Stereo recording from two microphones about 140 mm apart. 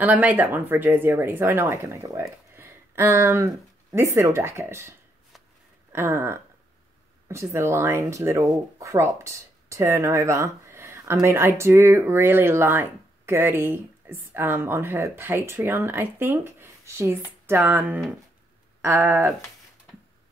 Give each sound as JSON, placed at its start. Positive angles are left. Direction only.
{"t": 0.0, "sound": "speech", "side_deg": -10}
{"t": 5.9, "sound": "speech", "side_deg": -20}